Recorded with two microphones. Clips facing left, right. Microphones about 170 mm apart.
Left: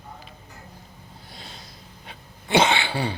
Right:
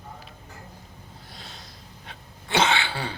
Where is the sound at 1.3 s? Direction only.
Centre (ahead or behind).